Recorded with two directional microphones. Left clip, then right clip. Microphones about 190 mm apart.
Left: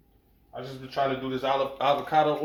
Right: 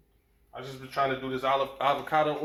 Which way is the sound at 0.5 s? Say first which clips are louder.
Left 1 dB; 15° left (ahead or behind).